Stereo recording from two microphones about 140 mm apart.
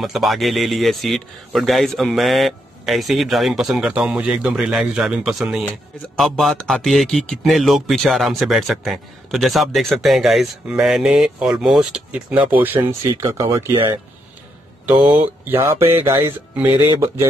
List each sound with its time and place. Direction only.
0.0 s speech: centre (ahead or behind); by 13.7 s 20° right (ahead or behind)
14.9 s speech: 35° right (ahead or behind)
16.2 s speech: 15° right (ahead or behind)